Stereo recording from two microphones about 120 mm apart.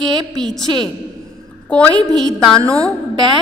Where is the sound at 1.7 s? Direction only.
10° left (ahead or behind).